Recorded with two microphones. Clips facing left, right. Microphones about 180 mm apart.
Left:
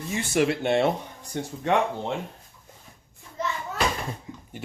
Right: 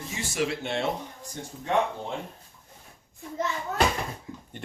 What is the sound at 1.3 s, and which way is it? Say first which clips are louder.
Speech: left 4 dB; 75° left (ahead or behind).